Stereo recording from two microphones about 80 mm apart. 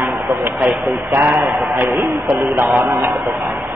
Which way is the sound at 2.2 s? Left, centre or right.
Right.